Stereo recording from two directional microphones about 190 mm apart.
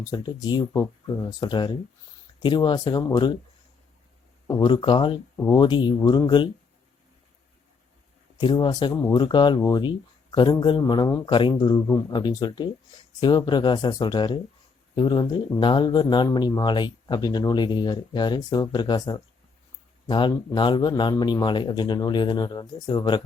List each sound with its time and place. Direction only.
0.0 s speech: 20° left (ahead or behind)
4.4 s speech: 15° left (ahead or behind)
4.7 s speech: 25° left (ahead or behind)
8.4 s speech: 25° left (ahead or behind)